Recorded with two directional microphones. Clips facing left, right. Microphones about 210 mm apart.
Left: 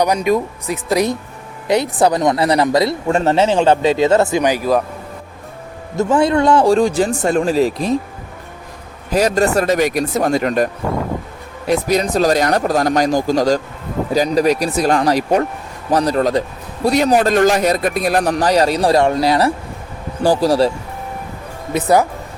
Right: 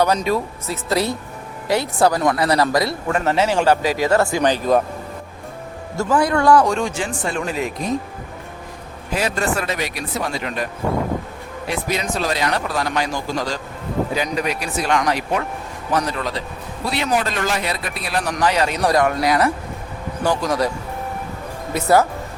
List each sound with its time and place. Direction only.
0.0 s a man's voice: 15° left (ahead or behind)
6.0 s speech: 25° left (ahead or behind)
9.1 s speech: 40° left (ahead or behind)
11.7 s speech: 40° left (ahead or behind)
21.7 s speech: 15° left (ahead or behind)